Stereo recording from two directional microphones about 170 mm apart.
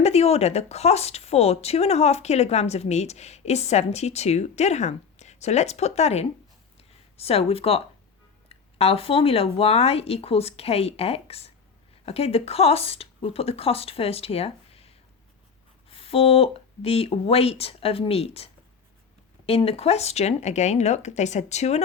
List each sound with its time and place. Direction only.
0.0 s speech: 40° left (ahead or behind)